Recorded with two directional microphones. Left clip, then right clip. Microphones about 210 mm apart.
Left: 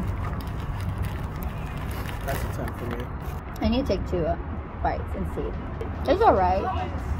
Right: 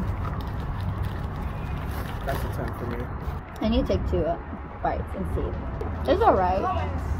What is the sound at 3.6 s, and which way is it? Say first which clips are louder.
Speech: even; 20° left (ahead or behind).